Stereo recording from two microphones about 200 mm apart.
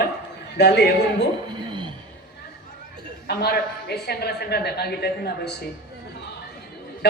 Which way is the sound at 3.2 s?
55° left (ahead or behind).